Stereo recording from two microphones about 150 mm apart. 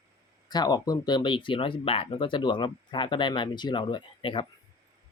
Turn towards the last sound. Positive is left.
turn(degrees=35)  # may be behind; listen again after turning